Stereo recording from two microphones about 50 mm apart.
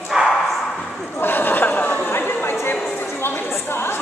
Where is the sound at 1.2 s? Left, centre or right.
Left.